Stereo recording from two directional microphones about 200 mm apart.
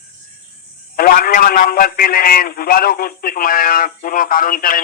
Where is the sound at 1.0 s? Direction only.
45° left (ahead or behind).